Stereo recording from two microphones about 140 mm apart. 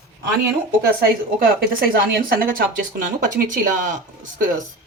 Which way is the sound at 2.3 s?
90° right.